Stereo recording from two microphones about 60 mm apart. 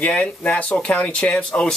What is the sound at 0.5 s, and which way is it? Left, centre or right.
Speech, left.